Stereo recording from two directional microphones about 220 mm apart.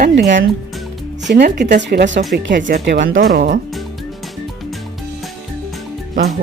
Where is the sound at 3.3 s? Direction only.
40° right (ahead or behind).